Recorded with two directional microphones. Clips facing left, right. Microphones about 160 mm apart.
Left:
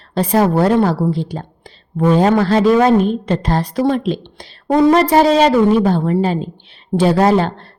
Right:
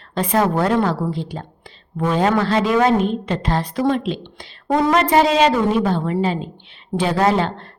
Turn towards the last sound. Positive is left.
turn(degrees=40)  # may be behind; listen again after turning